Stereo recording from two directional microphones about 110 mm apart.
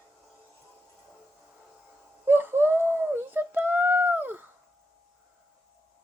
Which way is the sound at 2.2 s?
20° right (ahead or behind).